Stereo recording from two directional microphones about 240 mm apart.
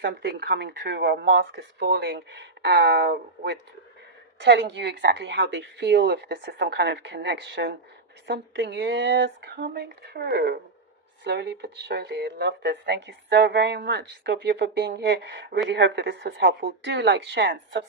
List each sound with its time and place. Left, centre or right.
0.0 s speech: right